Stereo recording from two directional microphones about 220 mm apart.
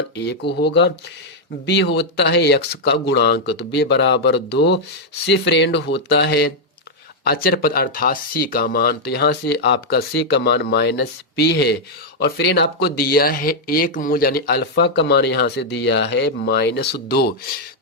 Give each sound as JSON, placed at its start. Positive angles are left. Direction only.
{"t": 0.2, "sound": "speech", "side_deg": 50}